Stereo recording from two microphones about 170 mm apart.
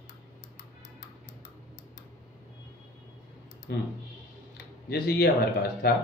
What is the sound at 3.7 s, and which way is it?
Speech, 70° left (ahead or behind).